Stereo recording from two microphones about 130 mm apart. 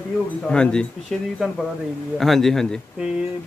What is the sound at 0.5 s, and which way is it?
Speech, 5° left (ahead or behind).